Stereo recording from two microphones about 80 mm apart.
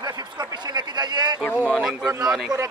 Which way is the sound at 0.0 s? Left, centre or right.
Right.